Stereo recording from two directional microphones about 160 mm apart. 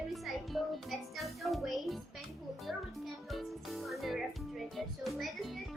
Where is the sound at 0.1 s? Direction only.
Centre (ahead or behind).